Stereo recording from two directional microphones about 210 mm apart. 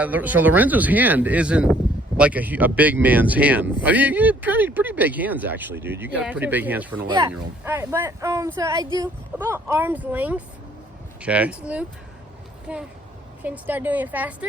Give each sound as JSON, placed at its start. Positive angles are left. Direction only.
{"t": 0.0, "sound": "speech", "side_deg": -10}
{"t": 7.1, "sound": "speech", "side_deg": -20}
{"t": 7.3, "sound": "speech", "side_deg": -10}